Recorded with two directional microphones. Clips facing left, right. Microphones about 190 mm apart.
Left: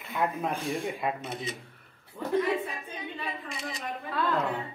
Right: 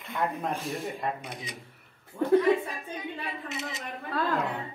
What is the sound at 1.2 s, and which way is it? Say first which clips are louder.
Speech: left 4 dB; 15° right (ahead or behind).